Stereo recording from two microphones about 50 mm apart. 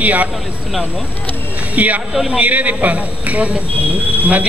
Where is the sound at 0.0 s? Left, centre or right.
Right.